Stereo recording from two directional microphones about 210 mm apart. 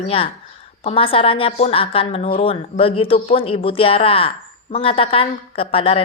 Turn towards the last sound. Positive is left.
turn(degrees=25)  # may be behind; listen again after turning